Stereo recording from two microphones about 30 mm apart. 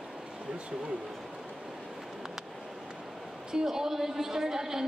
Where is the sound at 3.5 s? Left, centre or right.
Centre.